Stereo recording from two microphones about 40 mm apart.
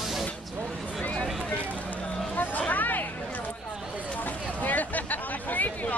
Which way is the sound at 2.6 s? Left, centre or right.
Left.